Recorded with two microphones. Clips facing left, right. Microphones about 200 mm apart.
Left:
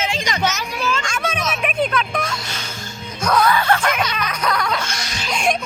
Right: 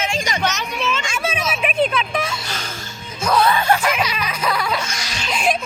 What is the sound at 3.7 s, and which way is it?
Music, 5° right (ahead or behind).